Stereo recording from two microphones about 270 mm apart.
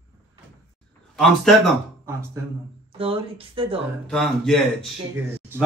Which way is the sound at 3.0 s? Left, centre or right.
Centre.